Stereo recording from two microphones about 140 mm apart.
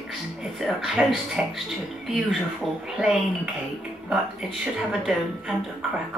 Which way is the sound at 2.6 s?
Centre (ahead or behind).